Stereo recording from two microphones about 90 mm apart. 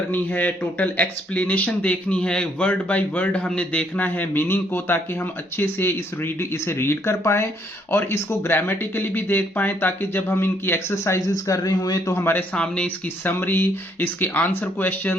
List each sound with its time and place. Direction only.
0.1 s speech: 20° left (ahead or behind); by 12.1 s 45° left (ahead or behind)
12.1 s speech: 20° left (ahead or behind)
13.2 s speech: 20° left (ahead or behind)